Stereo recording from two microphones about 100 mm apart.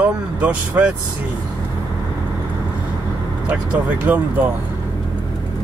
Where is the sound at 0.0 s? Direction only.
15° right (ahead or behind).